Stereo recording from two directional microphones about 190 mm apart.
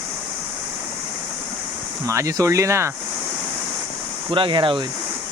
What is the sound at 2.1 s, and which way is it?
Speech, 15° right (ahead or behind).